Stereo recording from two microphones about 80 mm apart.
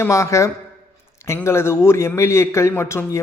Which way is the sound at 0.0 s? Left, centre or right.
Left.